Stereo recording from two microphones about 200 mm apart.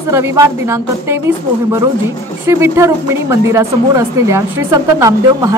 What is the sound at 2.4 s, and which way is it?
Speech, 15° right (ahead or behind).